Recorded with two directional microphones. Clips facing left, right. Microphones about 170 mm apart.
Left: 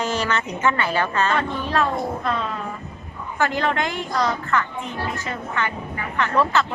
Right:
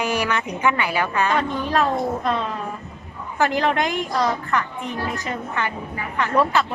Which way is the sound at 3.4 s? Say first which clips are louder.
Right 2 dB; 15° right (ahead or behind).